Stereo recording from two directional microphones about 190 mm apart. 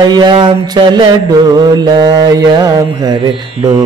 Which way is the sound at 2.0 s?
20° right (ahead or behind).